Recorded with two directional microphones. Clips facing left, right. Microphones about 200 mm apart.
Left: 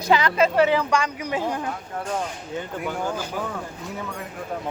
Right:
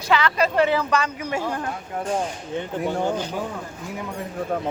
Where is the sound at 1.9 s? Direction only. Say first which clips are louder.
Right 6 dB; 20° right (ahead or behind).